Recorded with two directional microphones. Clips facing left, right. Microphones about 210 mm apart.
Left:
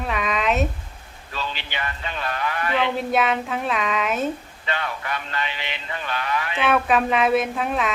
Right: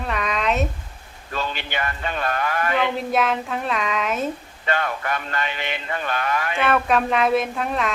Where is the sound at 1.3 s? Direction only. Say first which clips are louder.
Right 4 dB; 50° right (ahead or behind).